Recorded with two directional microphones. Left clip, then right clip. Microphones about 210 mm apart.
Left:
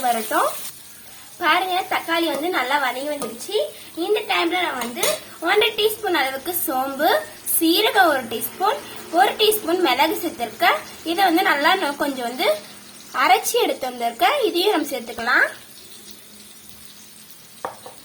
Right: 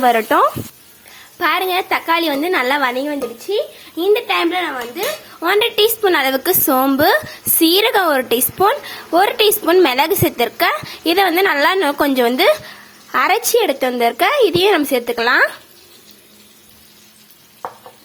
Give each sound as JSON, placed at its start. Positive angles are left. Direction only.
{"t": 0.0, "sound": "a woman's voice", "side_deg": -55}
{"t": 4.0, "sound": "dishes", "side_deg": -55}
{"t": 9.1, "sound": "a woman's voice", "side_deg": -55}